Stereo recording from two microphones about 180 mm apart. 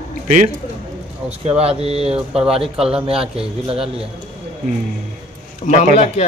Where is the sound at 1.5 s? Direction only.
35° right (ahead or behind).